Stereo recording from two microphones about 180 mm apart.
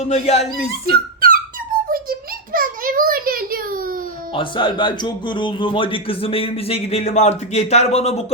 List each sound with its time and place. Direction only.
0.0 s a man's voice: 35° left (ahead or behind)
0.9 s music: 55° right (ahead or behind)
1.9 s a sound: 55° right (ahead or behind)
4.4 s a man's voice: 25° left (ahead or behind)